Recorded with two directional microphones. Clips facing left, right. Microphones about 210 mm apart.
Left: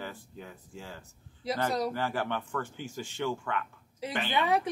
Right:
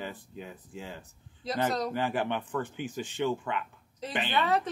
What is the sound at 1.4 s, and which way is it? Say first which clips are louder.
Speech: left 1 dB; 10° left (ahead or behind).